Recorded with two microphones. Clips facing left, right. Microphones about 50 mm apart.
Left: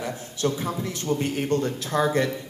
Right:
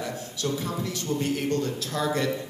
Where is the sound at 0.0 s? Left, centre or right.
Left.